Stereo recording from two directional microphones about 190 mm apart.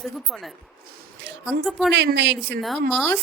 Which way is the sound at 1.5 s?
Centre (ahead or behind).